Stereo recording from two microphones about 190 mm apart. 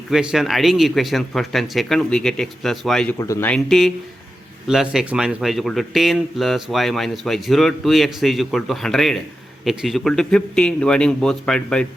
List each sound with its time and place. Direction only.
0.1 s speech: 5° right (ahead or behind)
3.2 s speech: 15° left (ahead or behind)
3.5 s speech: centre (ahead or behind)